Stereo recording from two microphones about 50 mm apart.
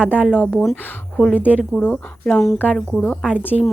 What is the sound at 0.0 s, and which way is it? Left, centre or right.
Speech, right.